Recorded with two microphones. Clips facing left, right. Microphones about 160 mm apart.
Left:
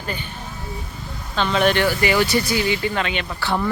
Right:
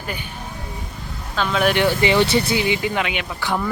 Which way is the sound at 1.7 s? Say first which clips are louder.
Right 2 dB; 20° right (ahead or behind).